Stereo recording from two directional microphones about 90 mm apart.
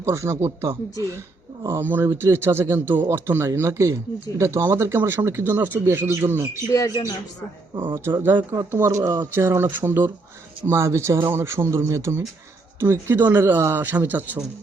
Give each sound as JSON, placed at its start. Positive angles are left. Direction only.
{"t": 0.0, "sound": "speech", "side_deg": -30}
{"t": 6.7, "sound": "speech", "side_deg": 40}
{"t": 7.9, "sound": "speech", "side_deg": -30}